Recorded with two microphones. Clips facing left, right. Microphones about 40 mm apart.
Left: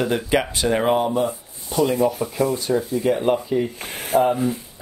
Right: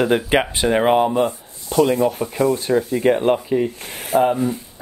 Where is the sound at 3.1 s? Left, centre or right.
Right.